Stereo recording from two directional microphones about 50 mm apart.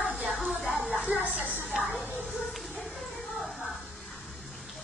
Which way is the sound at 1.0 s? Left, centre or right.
Right.